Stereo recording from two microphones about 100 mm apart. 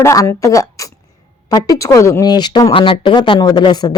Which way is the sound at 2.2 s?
45° left (ahead or behind).